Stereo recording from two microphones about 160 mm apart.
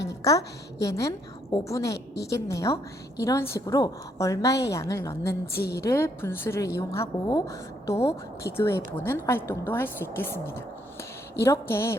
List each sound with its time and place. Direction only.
0.2 s a woman's voice: 20° left (ahead or behind)